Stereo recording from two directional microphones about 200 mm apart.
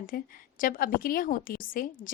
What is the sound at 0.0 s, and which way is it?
A woman's voice, 45° left (ahead or behind).